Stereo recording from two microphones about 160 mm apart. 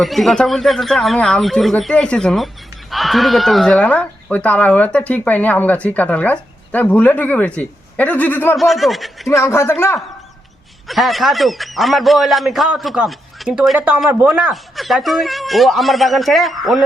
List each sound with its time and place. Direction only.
0.0 s a man's voice: centre (ahead or behind)
8.5 s a man's voice: centre (ahead or behind)
9.3 s speech: 15° left (ahead or behind)
10.8 s a man's voice: centre (ahead or behind)